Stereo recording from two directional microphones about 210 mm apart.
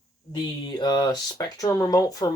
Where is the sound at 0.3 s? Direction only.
20° left (ahead or behind).